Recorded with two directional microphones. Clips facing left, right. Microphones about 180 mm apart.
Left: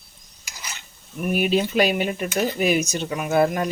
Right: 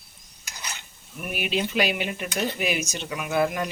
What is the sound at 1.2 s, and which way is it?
Speech, 40° left (ahead or behind).